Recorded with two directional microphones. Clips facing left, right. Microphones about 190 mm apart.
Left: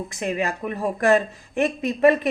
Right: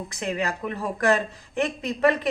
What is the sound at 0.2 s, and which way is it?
Speech, 20° left (ahead or behind).